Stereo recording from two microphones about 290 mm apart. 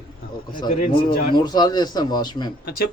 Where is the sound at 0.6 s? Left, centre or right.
Left.